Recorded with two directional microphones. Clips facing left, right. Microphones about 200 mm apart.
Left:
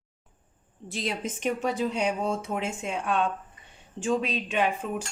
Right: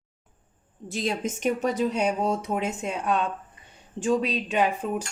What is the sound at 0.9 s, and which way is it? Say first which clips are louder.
Speech: right 4 dB; 45° right (ahead or behind).